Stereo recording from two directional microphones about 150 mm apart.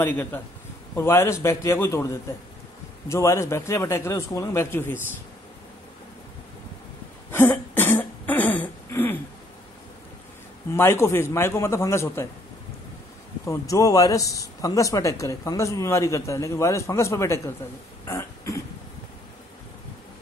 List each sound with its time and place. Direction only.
0.0 s a man's voice: 10° left (ahead or behind)
7.2 s cough: 15° left (ahead or behind)
10.7 s a man's voice: 15° left (ahead or behind)
13.5 s speech: 20° left (ahead or behind)
18.0 s throat clearing: 20° left (ahead or behind)